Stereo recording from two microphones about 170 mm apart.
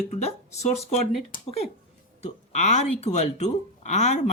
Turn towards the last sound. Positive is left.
turn(degrees=45)  # may be behind; listen again after turning